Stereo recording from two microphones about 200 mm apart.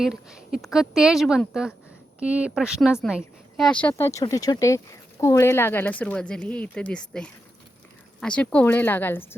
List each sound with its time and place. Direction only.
0.0 s a woman's voice: centre (ahead or behind)